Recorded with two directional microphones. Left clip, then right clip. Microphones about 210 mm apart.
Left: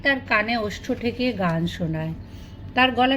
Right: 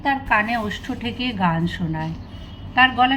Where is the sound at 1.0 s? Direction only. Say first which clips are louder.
Left 3 dB; 10° right (ahead or behind).